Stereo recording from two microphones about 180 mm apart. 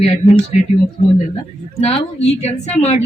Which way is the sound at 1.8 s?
35° left (ahead or behind).